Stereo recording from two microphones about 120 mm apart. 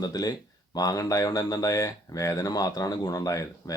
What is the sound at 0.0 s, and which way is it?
Speech, 35° left (ahead or behind).